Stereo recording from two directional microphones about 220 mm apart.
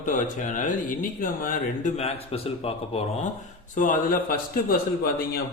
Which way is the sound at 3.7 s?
35° left (ahead or behind).